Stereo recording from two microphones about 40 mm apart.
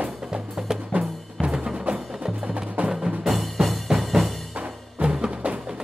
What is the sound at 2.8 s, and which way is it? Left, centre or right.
Music, right.